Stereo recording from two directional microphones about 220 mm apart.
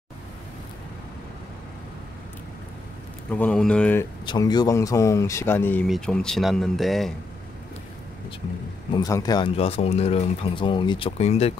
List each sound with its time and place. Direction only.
3.3 s speech: 5° left (ahead or behind)
4.3 s speech: 20° left (ahead or behind); by 7.2 s centre (ahead or behind)
8.9 s speech: 15° left (ahead or behind)